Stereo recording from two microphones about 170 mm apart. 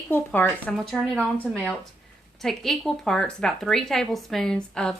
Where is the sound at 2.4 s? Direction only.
Centre (ahead or behind).